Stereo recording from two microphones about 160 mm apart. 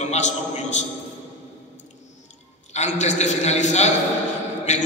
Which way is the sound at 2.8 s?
45° left (ahead or behind).